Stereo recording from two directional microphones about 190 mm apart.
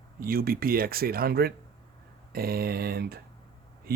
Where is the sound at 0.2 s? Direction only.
50° right (ahead or behind).